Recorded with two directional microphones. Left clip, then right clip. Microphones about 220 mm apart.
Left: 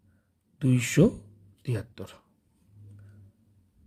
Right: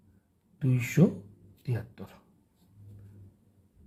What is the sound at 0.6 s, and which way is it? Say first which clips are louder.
Speech: left 5 dB; 40° left (ahead or behind).